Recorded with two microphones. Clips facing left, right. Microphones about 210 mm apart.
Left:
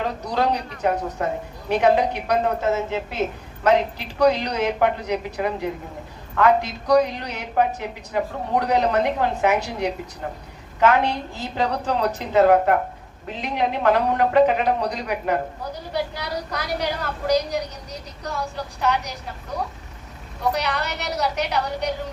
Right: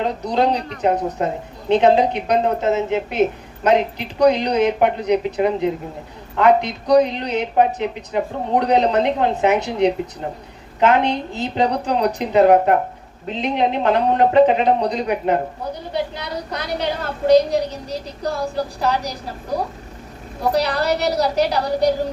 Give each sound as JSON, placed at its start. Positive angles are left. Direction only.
{"t": 0.0, "sound": "a woman's voice", "side_deg": -20}